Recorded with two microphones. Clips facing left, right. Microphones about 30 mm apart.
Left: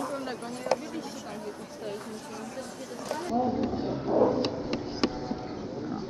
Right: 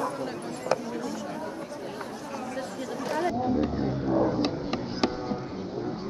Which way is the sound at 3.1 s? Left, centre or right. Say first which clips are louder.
Right 1 dB; centre.